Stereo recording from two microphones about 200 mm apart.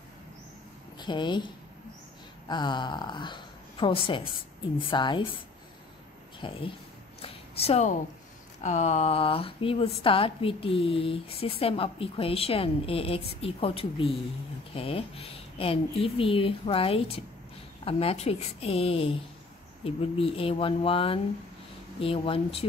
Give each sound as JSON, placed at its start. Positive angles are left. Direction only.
{"t": 0.9, "sound": "a woman's voice", "side_deg": 25}
{"t": 6.4, "sound": "a woman's voice", "side_deg": 25}
{"t": 7.2, "sound": "a sound", "side_deg": 30}
{"t": 8.6, "sound": "a woman's voice", "side_deg": 35}